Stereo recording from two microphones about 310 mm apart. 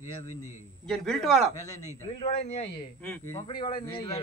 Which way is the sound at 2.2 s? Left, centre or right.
Centre.